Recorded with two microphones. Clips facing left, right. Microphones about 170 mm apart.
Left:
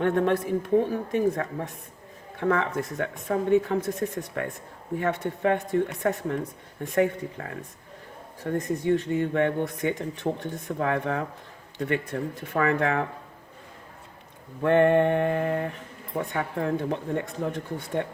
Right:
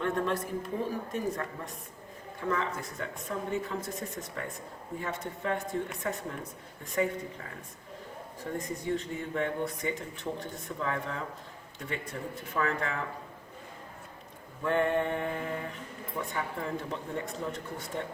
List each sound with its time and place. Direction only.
0.0 s speech: 60° left (ahead or behind)
14.6 s speech: 70° left (ahead or behind)